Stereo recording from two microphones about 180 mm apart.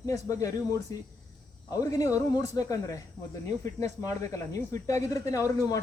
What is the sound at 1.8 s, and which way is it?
A man's voice, 20° left (ahead or behind).